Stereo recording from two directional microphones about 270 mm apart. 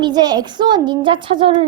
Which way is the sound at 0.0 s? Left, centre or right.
Centre.